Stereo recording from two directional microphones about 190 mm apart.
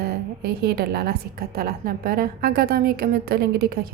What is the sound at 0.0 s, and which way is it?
A woman's voice, 55° right (ahead or behind).